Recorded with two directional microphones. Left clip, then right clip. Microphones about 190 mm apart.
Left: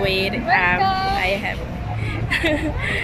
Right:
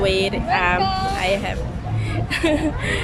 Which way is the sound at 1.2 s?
10° right (ahead or behind).